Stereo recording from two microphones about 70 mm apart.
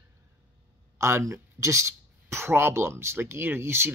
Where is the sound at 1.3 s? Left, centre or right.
Right.